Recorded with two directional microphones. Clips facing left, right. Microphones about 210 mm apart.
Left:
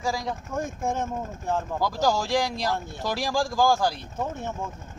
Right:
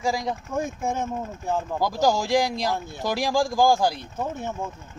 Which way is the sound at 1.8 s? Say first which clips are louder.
Right 3 dB; 15° right (ahead or behind).